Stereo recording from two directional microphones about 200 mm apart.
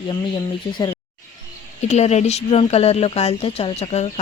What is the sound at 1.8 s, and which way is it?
Speech, 35° left (ahead or behind).